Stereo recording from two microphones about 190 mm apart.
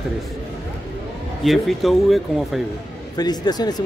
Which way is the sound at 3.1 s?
20° left (ahead or behind).